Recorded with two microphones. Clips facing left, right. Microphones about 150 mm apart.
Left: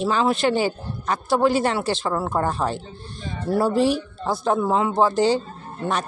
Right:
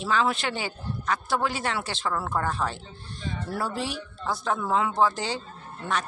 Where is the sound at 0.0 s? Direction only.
35° left (ahead or behind).